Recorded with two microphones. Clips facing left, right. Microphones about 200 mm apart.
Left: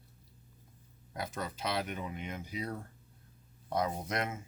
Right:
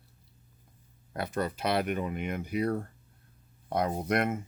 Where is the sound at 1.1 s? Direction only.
60° right (ahead or behind).